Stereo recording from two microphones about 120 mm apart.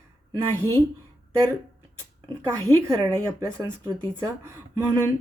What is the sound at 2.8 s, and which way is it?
A woman's voice, 25° right (ahead or behind).